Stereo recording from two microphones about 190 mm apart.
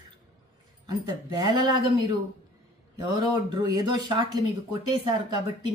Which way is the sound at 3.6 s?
20° right (ahead or behind).